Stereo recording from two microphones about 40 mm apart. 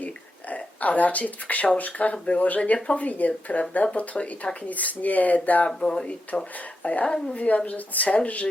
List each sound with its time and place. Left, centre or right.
0.5 s speech: left
3.0 s speech: left
5.6 s speech: left
6.8 s speech: left